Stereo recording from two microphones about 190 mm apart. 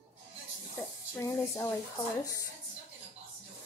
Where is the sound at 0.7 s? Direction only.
15° left (ahead or behind).